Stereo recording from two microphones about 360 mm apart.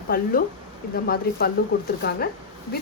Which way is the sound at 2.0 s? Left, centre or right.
Left.